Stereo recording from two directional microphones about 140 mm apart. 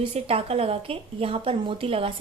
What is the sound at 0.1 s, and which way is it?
A woman's voice, 45° right (ahead or behind).